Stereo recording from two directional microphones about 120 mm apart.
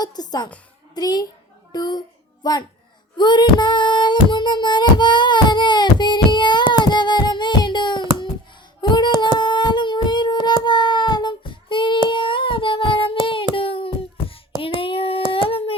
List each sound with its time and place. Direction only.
0.0 s a woman's voice: 35° left (ahead or behind)
3.2 s music: 40° left (ahead or behind)
8.8 s a sound: 35° left (ahead or behind)
12.0 s humming: 45° left (ahead or behind)
13.6 s a sound: 50° left (ahead or behind)
14.8 s child singing: 50° left (ahead or behind)
15.3 s humming: 50° left (ahead or behind)